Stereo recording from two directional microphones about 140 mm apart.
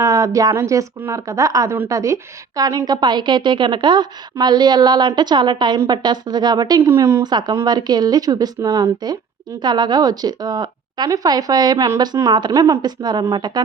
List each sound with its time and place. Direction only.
0.0 s a woman's voice: 25° right (ahead or behind)
7.2 s a woman's voice: 30° right (ahead or behind)